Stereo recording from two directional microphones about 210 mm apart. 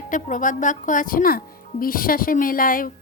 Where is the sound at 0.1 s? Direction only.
40° left (ahead or behind).